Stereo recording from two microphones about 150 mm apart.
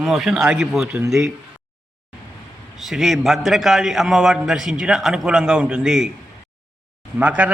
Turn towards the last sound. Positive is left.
turn(degrees=-10)  # may be behind; listen again after turning